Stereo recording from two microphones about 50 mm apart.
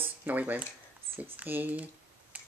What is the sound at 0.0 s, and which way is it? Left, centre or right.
Speech, right.